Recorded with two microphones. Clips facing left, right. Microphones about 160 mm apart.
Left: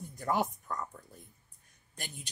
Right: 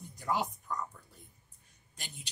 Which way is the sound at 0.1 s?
55° left (ahead or behind).